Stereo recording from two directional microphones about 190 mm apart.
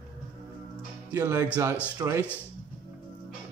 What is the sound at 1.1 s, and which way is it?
Speech, 15° right (ahead or behind).